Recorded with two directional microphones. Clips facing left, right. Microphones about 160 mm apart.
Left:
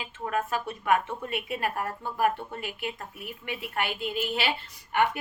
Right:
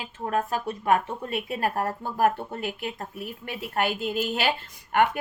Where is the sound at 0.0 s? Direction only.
40° right (ahead or behind).